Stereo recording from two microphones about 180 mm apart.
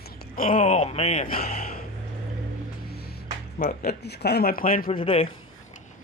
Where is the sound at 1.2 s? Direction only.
55° left (ahead or behind).